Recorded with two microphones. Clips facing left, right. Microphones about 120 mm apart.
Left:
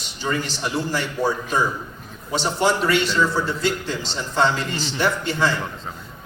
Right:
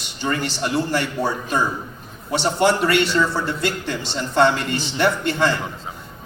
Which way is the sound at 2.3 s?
65° right (ahead or behind).